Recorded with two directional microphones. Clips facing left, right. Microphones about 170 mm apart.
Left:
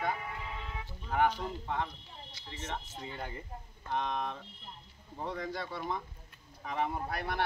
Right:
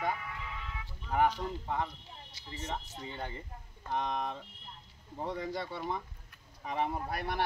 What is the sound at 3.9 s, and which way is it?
Speech, 5° right (ahead or behind).